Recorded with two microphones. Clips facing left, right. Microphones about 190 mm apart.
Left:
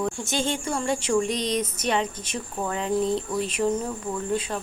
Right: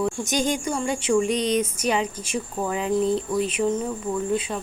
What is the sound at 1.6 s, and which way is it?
Speech, 10° right (ahead or behind).